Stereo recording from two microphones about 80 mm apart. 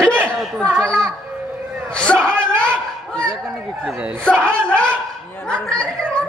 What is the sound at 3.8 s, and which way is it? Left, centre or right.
Speech, centre.